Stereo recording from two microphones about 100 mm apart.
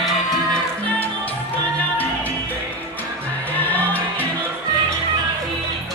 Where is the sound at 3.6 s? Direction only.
15° left (ahead or behind).